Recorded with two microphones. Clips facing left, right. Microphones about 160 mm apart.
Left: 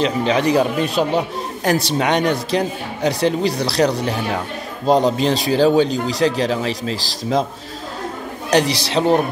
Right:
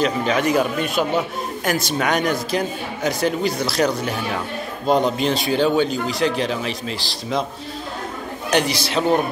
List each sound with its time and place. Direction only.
0.0 s a man's voice: 30° left (ahead or behind)
8.5 s a man's voice: 35° left (ahead or behind)